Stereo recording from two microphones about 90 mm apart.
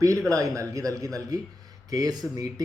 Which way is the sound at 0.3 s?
35° right (ahead or behind).